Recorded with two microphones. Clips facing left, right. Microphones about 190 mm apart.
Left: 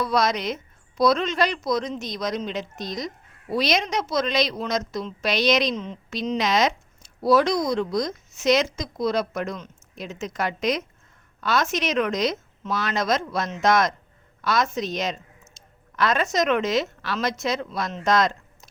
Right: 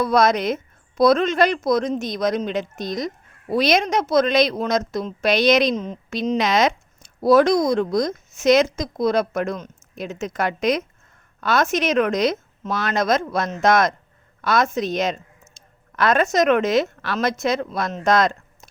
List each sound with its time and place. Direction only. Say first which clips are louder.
0.0 s speech: right 5 dB; 50° right (ahead or behind)